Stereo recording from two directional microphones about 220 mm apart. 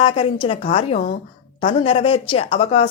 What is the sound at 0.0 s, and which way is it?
Speech, 25° left (ahead or behind).